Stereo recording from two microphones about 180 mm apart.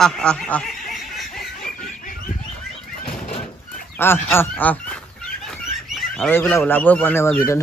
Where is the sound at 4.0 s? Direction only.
10° left (ahead or behind).